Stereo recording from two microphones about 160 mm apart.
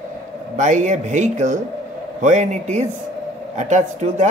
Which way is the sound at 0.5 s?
50° right (ahead or behind).